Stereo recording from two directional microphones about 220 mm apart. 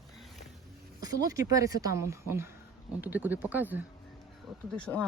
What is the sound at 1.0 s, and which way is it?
A woman's voice, 15° right (ahead or behind).